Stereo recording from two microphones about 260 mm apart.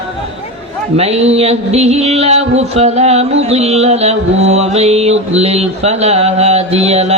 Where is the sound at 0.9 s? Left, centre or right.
Right.